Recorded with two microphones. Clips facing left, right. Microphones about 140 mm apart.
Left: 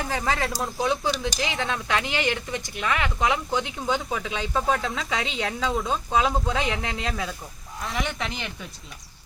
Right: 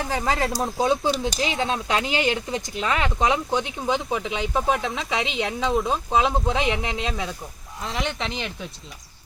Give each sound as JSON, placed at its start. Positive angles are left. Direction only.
{"t": 0.1, "sound": "speech", "side_deg": -30}
{"t": 8.2, "sound": "speech", "side_deg": -30}